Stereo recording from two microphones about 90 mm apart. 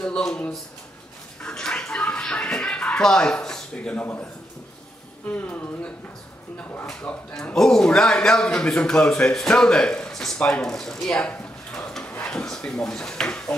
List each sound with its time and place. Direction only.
0.0 s a man's voice: 10° left (ahead or behind)
1.4 s a sound: 10° left (ahead or behind)
5.2 s a man's voice: 15° left (ahead or behind)
7.3 s a man's voice: 5° left (ahead or behind)